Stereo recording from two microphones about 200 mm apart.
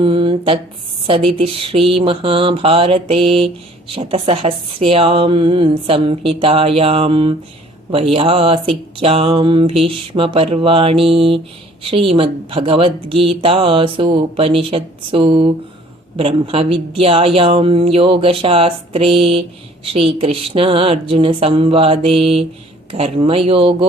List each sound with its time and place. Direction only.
0.0 s a woman's voice: 25° right (ahead or behind)